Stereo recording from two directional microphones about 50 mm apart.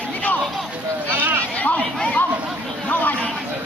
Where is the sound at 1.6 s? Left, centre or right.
Left.